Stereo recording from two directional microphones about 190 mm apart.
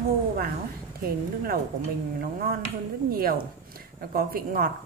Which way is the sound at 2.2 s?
50° right (ahead or behind).